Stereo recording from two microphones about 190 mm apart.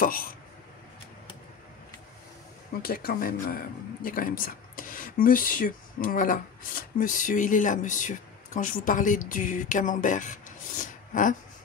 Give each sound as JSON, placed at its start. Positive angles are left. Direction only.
{"t": 0.0, "sound": "speech", "side_deg": 50}
{"t": 2.7, "sound": "speech", "side_deg": 50}